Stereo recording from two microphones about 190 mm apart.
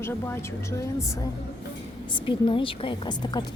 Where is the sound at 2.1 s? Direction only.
25° left (ahead or behind).